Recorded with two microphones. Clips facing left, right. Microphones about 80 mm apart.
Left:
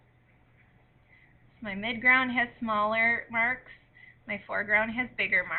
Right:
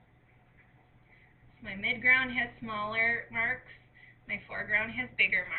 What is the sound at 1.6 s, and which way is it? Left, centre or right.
A woman's voice, left.